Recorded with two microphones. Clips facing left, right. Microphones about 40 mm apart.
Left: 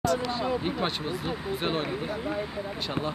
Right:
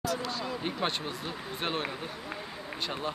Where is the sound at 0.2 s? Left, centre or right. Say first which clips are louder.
Left 6 dB; left.